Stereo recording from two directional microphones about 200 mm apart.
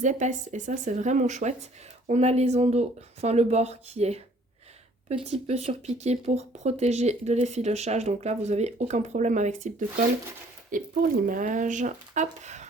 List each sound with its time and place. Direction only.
0.0 s speech: 35° right (ahead or behind)